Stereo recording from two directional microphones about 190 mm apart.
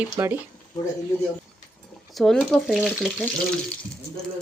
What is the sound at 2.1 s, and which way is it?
Speech, centre (ahead or behind).